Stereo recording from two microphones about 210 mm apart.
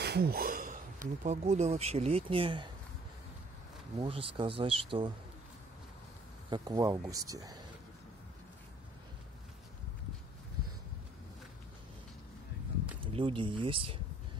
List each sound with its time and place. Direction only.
0.0 s a sound: 50° right (ahead or behind)
1.2 s speech: 35° right (ahead or behind)
4.0 s speech: 25° right (ahead or behind)
6.5 s speech: 15° right (ahead or behind)
13.0 s speech: 25° right (ahead or behind)